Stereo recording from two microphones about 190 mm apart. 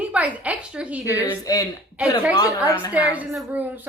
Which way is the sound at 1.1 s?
20° left (ahead or behind).